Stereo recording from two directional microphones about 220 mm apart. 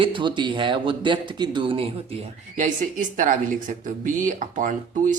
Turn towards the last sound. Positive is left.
turn(degrees=-35)  # may be behind; listen again after turning